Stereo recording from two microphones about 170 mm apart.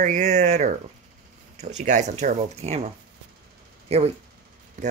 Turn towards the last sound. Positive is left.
turn(degrees=-35)  # may be behind; listen again after turning